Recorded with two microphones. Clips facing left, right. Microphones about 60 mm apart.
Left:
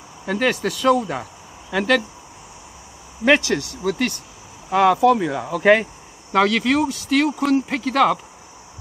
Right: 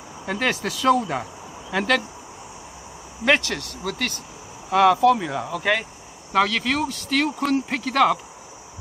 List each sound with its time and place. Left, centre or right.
0.4 s speech: centre
3.3 s speech: centre
5.6 s speech: left
6.3 s speech: centre